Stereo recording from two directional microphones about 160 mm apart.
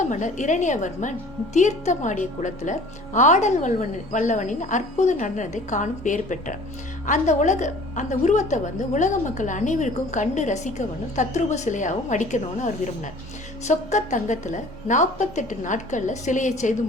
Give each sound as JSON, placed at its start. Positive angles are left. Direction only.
{"t": 0.0, "sound": "a woman's voice", "side_deg": 50}